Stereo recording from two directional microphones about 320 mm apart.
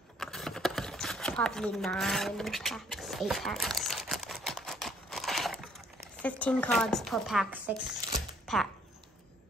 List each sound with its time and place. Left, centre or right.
0.2 s a sound: centre
6.2 s chopping: centre
8.5 s speech: centre